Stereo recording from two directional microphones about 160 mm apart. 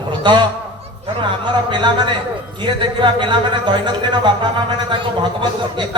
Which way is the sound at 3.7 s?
30° right (ahead or behind).